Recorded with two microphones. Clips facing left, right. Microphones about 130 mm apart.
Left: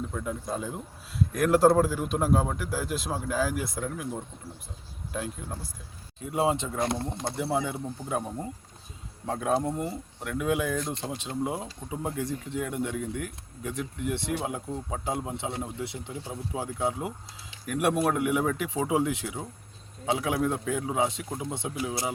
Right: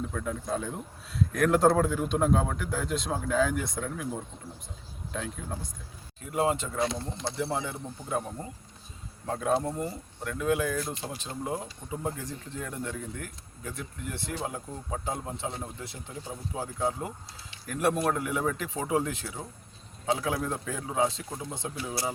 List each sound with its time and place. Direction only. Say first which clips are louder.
0.1 s a man's voice: right 1 dB; 5° left (ahead or behind)
6.3 s speech: left 1 dB; 20° left (ahead or behind)
7.0 s speech: left 2 dB; 50° left (ahead or behind)
7.3 s a man's voice: left 3 dB; 20° left (ahead or behind)
9.2 s a man's voice: left 1 dB; 10° left (ahead or behind)
10.8 s speech: left 2 dB; 5° right (ahead or behind)
11.2 s a man's voice: left 3 dB; 15° left (ahead or behind)